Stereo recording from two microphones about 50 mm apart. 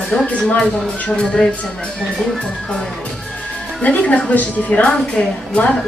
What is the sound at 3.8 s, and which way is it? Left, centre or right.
Speech, left.